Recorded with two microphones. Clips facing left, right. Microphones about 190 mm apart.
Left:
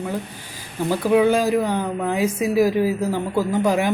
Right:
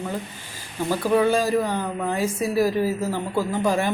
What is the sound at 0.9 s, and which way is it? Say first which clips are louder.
A man's voice: left 3 dB; 10° left (ahead or behind).